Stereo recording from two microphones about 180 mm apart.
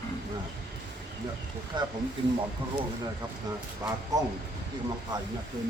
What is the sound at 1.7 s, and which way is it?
Speech, 25° right (ahead or behind).